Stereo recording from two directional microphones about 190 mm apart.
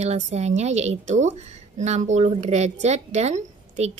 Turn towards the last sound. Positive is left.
turn(degrees=-35)  # may be behind; listen again after turning